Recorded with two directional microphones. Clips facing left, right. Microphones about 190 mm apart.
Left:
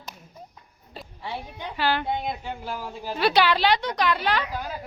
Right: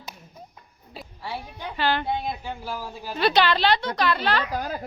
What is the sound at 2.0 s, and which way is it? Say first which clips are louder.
Speech: even; 5° right (ahead or behind).